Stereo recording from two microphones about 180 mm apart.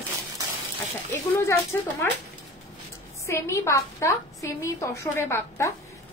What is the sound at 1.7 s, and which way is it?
Speech, 15° left (ahead or behind).